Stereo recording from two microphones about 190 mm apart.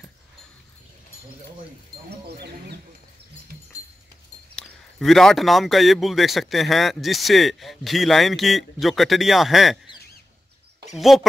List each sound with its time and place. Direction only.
2.2 s speech: 60° right (ahead or behind)
4.6 s a man's voice: centre (ahead or behind)
10.9 s a man's voice: centre (ahead or behind)